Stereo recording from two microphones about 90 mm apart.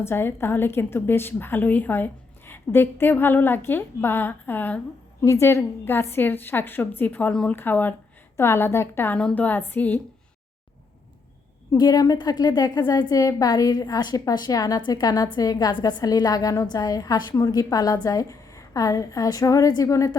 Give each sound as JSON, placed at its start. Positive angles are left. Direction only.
{"t": 0.0, "sound": "a woman's voice", "side_deg": 25}
{"t": 5.2, "sound": "a woman's voice", "side_deg": 30}
{"t": 9.1, "sound": "a woman's voice", "side_deg": 15}
{"t": 11.7, "sound": "a woman's voice", "side_deg": 45}
{"t": 14.8, "sound": "a woman's voice", "side_deg": 55}